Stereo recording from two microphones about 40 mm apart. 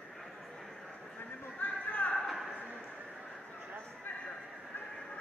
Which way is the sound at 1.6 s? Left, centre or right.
Left.